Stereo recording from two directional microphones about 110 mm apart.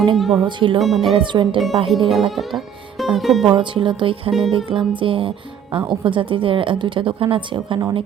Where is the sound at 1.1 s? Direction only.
50° right (ahead or behind).